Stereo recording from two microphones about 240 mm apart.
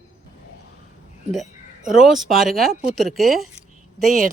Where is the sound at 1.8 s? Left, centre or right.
Centre.